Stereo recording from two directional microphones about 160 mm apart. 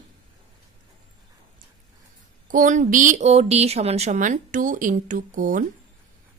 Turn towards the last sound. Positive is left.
turn(degrees=-55)  # may be behind; listen again after turning